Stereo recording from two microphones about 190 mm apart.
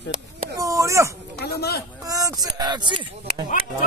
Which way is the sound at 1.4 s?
60° left (ahead or behind).